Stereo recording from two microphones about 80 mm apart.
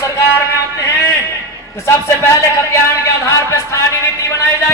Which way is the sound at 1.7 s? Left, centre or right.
Left.